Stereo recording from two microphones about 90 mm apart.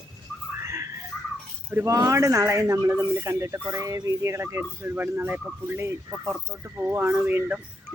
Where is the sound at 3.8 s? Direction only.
40° right (ahead or behind).